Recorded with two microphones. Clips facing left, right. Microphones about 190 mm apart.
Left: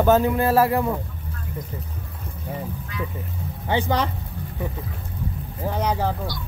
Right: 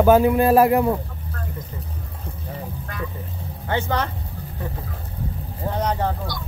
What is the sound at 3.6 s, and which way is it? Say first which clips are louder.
Speech: left 1 dB; 15° left (ahead or behind).